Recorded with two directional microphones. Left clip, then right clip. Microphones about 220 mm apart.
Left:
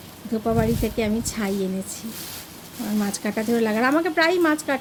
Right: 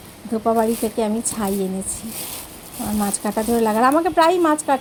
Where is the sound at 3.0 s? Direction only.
Centre (ahead or behind).